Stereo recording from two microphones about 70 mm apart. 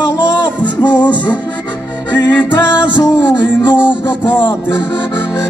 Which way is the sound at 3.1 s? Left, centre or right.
Left.